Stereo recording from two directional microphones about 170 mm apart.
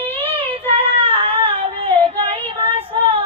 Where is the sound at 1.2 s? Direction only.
35° right (ahead or behind).